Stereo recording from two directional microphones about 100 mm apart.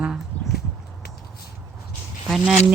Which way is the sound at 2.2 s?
5° right (ahead or behind).